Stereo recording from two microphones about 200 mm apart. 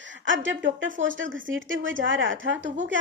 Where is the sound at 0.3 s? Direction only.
70° right (ahead or behind).